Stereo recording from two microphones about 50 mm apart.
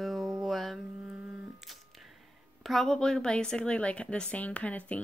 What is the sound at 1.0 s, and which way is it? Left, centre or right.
Humming, centre.